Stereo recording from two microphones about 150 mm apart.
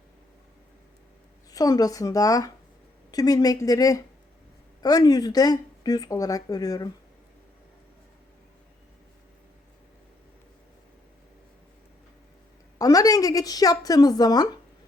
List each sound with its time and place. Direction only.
1.5 s speech: 25° left (ahead or behind)
12.8 s a woman's voice: 25° left (ahead or behind)